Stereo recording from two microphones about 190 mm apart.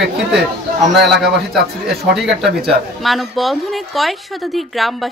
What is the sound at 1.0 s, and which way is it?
A man's voice, centre (ahead or behind).